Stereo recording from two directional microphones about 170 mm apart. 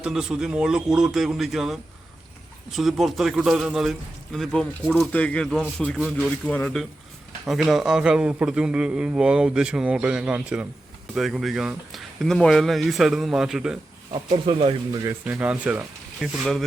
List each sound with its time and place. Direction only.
0.0 s a man's voice: 5° right (ahead or behind)
14.1 s speech: 30° right (ahead or behind)
15.2 s a man's voice: 10° right (ahead or behind)